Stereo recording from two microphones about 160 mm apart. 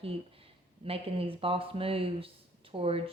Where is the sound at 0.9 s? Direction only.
35° right (ahead or behind).